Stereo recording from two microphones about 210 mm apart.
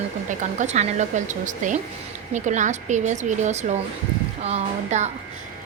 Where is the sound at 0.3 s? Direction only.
35° right (ahead or behind).